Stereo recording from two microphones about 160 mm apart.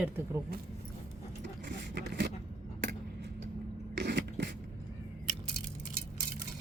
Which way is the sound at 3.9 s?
90° right.